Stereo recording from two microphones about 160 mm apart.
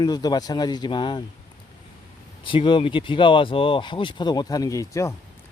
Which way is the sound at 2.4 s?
30° left (ahead or behind).